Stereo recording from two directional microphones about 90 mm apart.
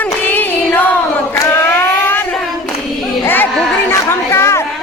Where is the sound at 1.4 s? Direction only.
25° left (ahead or behind).